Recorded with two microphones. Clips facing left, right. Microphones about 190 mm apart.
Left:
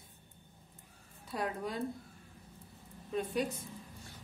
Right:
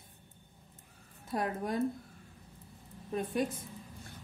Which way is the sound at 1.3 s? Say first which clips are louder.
Right 3 dB; 50° right (ahead or behind).